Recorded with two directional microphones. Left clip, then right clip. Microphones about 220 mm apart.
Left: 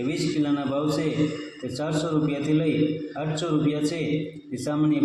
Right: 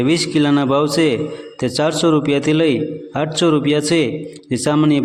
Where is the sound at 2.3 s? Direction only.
50° right (ahead or behind).